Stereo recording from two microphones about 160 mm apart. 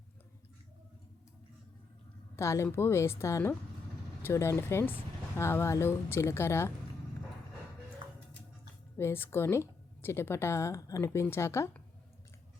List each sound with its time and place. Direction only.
2.3 s a woman's voice: 15° left (ahead or behind)
9.0 s a woman's voice: 15° left (ahead or behind)